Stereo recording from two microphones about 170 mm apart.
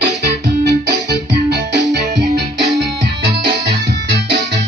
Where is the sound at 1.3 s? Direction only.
80° right.